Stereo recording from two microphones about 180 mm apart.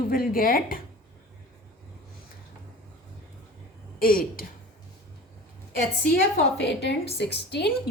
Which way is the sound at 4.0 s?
55° left (ahead or behind).